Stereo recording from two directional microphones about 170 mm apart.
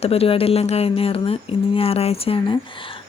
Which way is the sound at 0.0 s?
35° left (ahead or behind).